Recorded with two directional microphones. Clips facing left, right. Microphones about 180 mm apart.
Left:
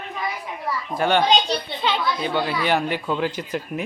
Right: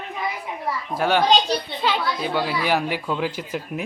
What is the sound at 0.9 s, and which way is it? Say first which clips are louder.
A child's voice: even; 5° right (ahead or behind).